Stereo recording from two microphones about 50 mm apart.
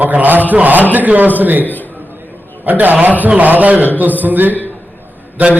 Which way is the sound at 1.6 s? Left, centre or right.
Left.